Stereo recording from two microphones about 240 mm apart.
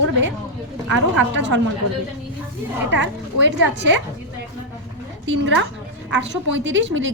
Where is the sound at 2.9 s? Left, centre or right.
Right.